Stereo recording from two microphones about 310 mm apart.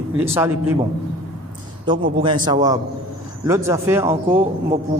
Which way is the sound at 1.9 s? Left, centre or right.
Centre.